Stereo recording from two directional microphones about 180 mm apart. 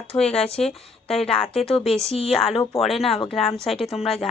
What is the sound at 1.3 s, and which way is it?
A woman's voice, 5° left (ahead or behind).